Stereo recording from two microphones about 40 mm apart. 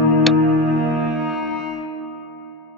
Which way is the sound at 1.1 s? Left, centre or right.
Centre.